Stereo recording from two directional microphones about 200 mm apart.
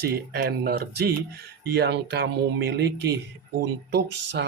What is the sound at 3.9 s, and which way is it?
Speech, 60° right (ahead or behind).